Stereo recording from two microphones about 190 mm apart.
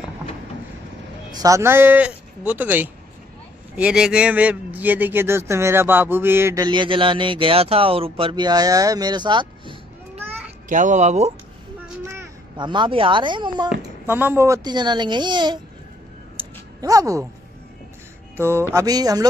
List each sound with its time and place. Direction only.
1.3 s a man's voice: 15° right (ahead or behind)
5.5 s a sound: 15° right (ahead or behind)
10.7 s speech: 40° right (ahead or behind)
12.0 s a child's voice: 15° right (ahead or behind)
13.7 s a sound: 10° right (ahead or behind)
18.3 s a man's voice: 15° right (ahead or behind)